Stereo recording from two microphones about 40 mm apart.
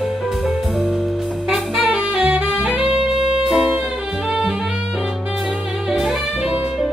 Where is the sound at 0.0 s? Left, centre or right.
Centre.